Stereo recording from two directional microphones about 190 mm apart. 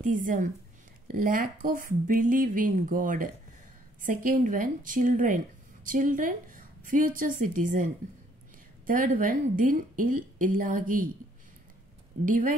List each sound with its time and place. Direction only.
0.0 s a woman's voice: 45° right (ahead or behind)
12.3 s a woman's voice: 45° right (ahead or behind)